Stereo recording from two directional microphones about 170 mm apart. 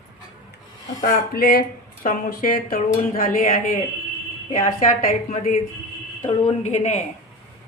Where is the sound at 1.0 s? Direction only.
60° left (ahead or behind).